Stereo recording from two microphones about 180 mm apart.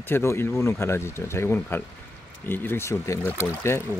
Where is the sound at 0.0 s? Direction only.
15° left (ahead or behind).